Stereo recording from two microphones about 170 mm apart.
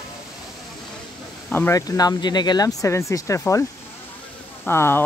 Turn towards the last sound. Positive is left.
turn(degrees=15)  # may be behind; listen again after turning